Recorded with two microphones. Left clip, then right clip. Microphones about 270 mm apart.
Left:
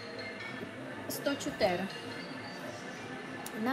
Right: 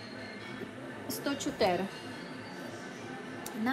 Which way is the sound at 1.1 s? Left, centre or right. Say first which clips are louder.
Even; centre.